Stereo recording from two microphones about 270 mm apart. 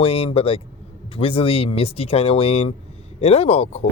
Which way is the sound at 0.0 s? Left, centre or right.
Left.